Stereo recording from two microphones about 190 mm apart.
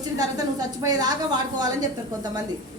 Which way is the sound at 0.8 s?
20° right (ahead or behind).